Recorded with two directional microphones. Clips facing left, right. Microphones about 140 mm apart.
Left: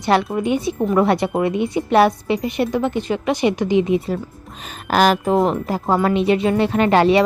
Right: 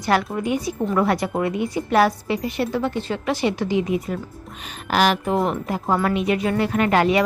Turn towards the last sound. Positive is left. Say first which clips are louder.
# left 4 dB
turn(degrees=30)  # may be behind; listen again after turning